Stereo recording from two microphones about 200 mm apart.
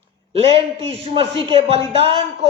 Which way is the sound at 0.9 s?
30° right (ahead or behind).